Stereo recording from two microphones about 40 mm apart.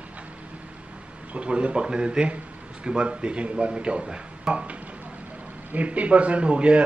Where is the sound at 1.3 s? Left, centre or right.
Right.